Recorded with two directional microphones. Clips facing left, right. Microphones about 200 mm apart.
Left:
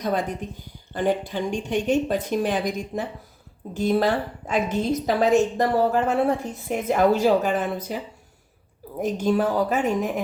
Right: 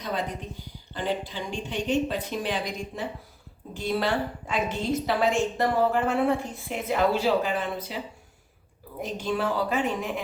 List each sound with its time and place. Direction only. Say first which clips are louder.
0.0 s a woman's voice: left 6 dB; 45° left (ahead or behind)
9.0 s a woman's voice: left 7 dB; 45° left (ahead or behind)